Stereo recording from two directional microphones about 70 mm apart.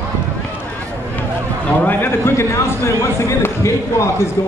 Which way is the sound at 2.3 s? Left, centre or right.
Left.